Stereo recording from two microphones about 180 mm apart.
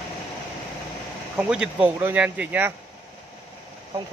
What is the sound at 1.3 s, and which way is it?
Speech, 5° right (ahead or behind).